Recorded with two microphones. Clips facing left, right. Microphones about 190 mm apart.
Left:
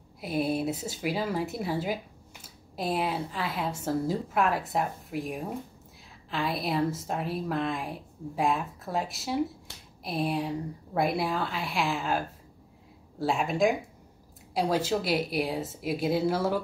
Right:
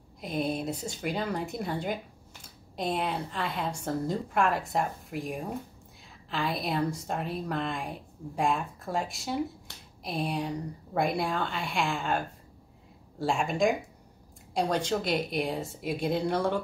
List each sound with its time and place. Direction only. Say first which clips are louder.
0.2 s a woman's voice: left 3 dB; 5° left (ahead or behind)